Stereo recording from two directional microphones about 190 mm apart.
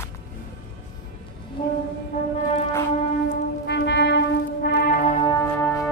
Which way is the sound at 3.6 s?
65° left (ahead or behind).